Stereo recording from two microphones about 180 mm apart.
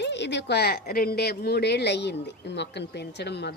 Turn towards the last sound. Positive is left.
turn(degrees=70)  # may be behind; listen again after turning